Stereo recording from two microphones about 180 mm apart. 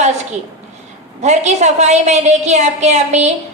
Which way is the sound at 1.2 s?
40° right (ahead or behind).